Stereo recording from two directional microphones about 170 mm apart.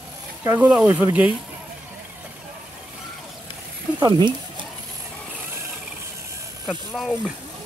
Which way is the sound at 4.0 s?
25° right (ahead or behind).